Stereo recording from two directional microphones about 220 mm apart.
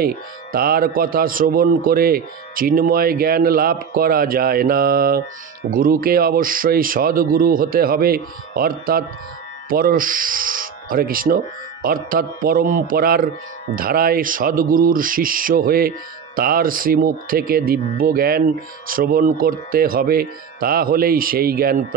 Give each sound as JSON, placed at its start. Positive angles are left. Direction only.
{"t": 0.0, "sound": "a man's voice", "side_deg": -45}